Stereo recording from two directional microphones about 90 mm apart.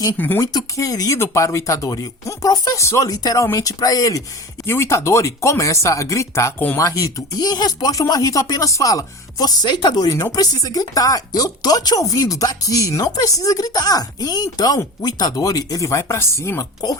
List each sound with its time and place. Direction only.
0.2 s speech: 20° left (ahead or behind)
0.5 s chopping: 45° left (ahead or behind)
3.1 s speech: 40° left (ahead or behind)
4.6 s chopping: 30° left (ahead or behind)
6.7 s speech: 40° left (ahead or behind)
15.0 s chopping: 45° left (ahead or behind)